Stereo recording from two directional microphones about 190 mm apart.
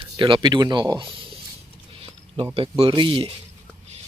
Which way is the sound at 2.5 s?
30° right (ahead or behind).